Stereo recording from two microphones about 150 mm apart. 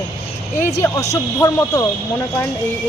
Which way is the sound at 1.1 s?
20° left (ahead or behind).